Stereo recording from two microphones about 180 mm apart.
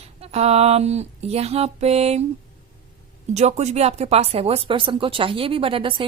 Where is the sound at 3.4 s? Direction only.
40° right (ahead or behind).